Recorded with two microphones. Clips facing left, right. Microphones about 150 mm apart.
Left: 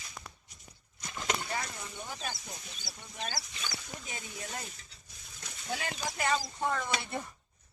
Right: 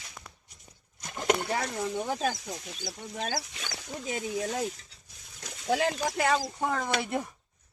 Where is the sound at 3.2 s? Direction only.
50° right (ahead or behind).